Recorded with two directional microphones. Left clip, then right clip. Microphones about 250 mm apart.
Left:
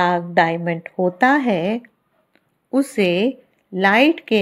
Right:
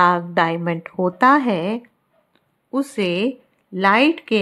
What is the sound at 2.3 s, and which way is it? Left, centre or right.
A woman's voice, centre.